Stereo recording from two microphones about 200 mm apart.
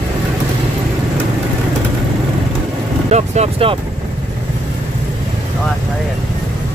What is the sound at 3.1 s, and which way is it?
Vehicle, 35° right (ahead or behind).